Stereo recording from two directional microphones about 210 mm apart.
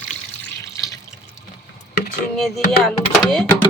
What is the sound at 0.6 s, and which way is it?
Water, 15° left (ahead or behind).